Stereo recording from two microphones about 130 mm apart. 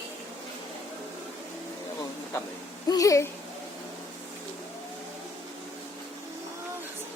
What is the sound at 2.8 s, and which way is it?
Speech, 25° left (ahead or behind).